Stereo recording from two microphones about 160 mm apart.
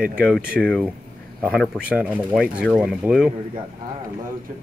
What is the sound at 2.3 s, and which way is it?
Speech, 5° left (ahead or behind).